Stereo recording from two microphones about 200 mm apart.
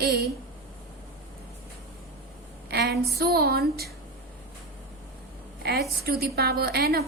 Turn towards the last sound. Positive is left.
turn(degrees=-50)  # may be behind; listen again after turning